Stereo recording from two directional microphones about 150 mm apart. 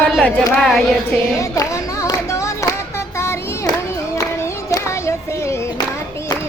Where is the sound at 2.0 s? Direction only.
20° left (ahead or behind).